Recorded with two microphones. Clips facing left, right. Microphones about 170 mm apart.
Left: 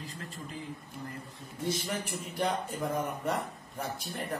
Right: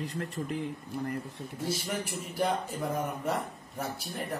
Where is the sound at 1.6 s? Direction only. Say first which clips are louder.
Even; 10° right (ahead or behind).